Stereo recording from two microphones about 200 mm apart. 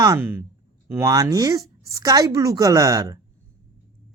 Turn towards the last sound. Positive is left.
turn(degrees=-15)  # may be behind; listen again after turning